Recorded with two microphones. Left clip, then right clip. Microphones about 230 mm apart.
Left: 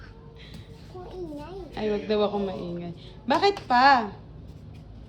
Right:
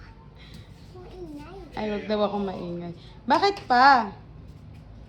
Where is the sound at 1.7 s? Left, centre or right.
Right.